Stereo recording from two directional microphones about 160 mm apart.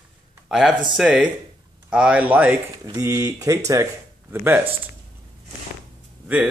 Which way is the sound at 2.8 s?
20° right (ahead or behind).